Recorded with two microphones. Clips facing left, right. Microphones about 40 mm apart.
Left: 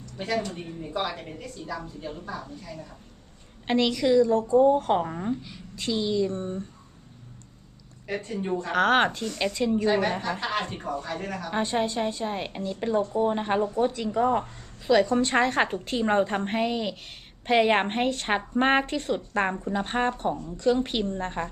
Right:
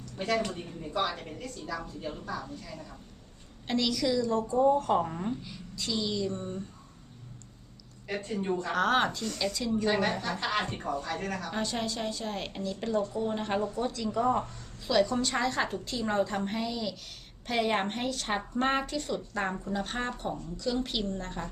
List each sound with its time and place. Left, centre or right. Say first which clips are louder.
0.5 s a woman's voice: left 2 dB; left
3.7 s a woman's voice: left 6 dB; left
4.6 s a woman's voice: left 4 dB; left
5.0 s a woman's voice: left 4 dB; left
5.7 s a woman's voice: left 6 dB; left
8.3 s a woman's voice: even; centre
8.7 s a woman's voice: left 5 dB; left
9.0 s a woman's voice: left 4 dB; left
9.8 s a woman's voice: left 3 dB; centre
10.1 s a woman's voice: left 3 dB; left
14.2 s a woman's voice: left 4 dB; left
14.4 s a woman's voice: left 8 dB; left